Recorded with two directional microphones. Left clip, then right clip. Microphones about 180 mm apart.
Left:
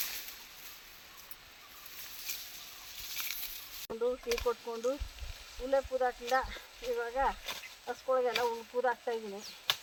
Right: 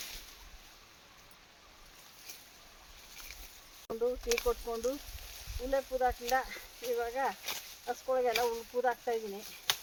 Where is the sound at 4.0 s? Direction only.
20° right (ahead or behind).